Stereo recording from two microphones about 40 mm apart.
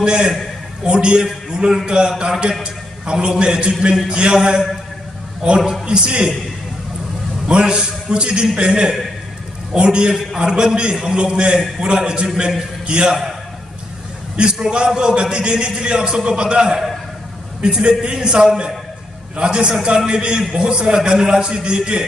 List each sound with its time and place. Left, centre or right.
0.0 s a man's voice: right
5.9 s a man's voice: right
7.4 s a man's voice: right
14.3 s a man's voice: right